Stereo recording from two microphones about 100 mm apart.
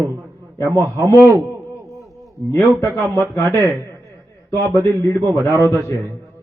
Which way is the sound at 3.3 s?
30° left (ahead or behind).